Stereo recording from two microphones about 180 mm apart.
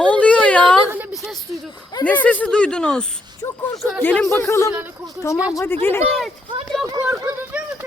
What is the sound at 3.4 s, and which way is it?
Speech, 20° left (ahead or behind).